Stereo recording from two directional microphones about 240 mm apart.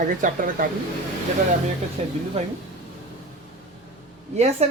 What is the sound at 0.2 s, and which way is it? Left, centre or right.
Speech, right.